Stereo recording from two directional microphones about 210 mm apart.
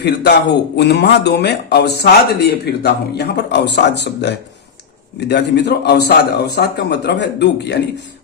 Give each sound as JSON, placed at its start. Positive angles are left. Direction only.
{"t": 0.0, "sound": "speech", "side_deg": 55}